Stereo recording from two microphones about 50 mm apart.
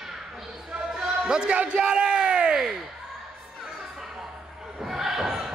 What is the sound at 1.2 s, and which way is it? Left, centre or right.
Music, centre.